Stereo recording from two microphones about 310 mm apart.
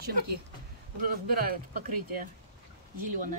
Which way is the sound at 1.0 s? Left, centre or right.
Right.